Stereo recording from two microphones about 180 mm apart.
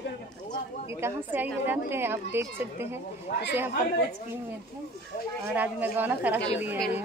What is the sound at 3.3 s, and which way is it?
Speech, 50° left (ahead or behind).